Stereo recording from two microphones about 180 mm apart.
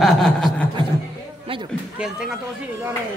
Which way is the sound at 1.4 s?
30° right (ahead or behind).